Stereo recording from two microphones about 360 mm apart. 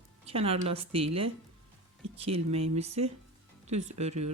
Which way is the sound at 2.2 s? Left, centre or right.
Centre.